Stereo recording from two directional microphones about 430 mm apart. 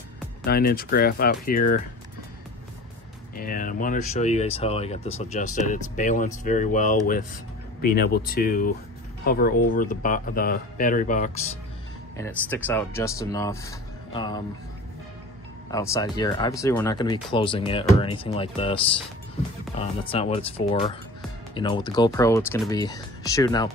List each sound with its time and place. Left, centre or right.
0.5 s speech: left
3.3 s speech: centre
12.2 s speech: centre
15.7 s speech: centre